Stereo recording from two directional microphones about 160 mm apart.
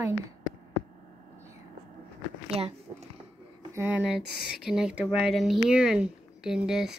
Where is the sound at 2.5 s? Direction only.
40° right (ahead or behind).